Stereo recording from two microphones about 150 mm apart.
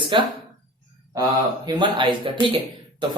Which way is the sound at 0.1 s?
35° right (ahead or behind).